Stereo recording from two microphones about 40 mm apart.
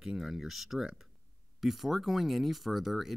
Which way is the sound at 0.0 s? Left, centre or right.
Centre.